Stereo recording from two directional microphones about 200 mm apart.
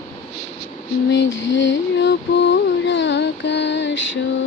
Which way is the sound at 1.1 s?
65° left (ahead or behind).